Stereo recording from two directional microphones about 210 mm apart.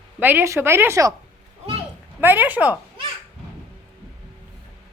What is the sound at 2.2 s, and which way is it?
Speech, 10° right (ahead or behind).